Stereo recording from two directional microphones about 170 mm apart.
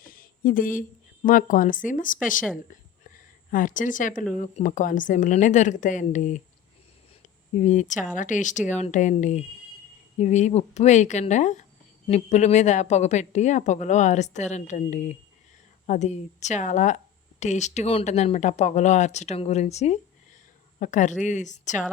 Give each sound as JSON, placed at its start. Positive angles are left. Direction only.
{"t": 0.0, "sound": "speech", "side_deg": 55}
{"t": 3.0, "sound": "a sound", "side_deg": 55}
{"t": 4.4, "sound": "a woman's voice", "side_deg": 50}
{"t": 7.5, "sound": "a woman's voice", "side_deg": 45}